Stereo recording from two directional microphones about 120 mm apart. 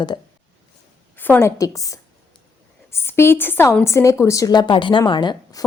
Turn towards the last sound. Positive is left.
turn(degrees=40)  # may be behind; listen again after turning